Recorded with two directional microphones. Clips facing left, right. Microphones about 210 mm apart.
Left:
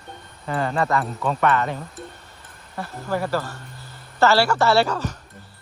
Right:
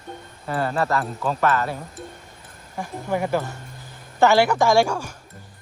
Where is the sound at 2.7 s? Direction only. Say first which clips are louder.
Right 1 dB; 15° right (ahead or behind).